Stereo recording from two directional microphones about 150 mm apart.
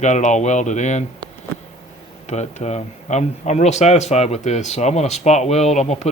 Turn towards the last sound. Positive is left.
turn(degrees=50)  # may be behind; listen again after turning